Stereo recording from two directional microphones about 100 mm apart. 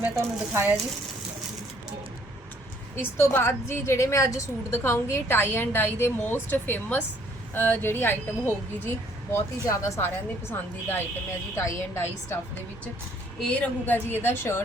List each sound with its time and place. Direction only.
0.2 s speech: 20° right (ahead or behind)
2.9 s a woman's voice: 25° left (ahead or behind)
9.6 s a woman's voice: 30° left (ahead or behind)
10.5 s a woman's voice: 20° left (ahead or behind)
13.4 s a woman's voice: 10° left (ahead or behind)